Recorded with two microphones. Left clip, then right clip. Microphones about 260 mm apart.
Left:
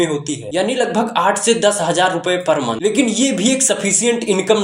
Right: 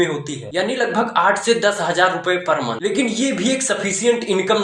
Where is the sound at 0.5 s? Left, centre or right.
Left.